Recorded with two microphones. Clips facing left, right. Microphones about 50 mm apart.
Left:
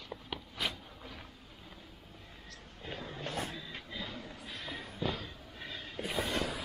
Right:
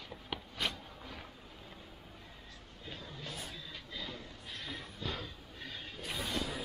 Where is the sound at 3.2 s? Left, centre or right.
Left.